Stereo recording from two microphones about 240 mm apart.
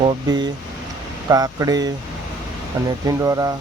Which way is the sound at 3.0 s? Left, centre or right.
Centre.